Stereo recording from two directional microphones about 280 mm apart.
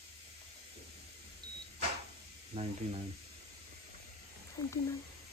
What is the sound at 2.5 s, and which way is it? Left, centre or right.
Speech, centre.